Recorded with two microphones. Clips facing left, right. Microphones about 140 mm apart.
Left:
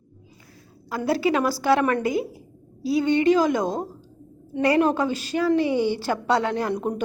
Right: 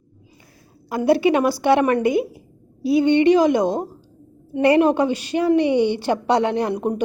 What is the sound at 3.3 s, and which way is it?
A woman's voice, 20° right (ahead or behind).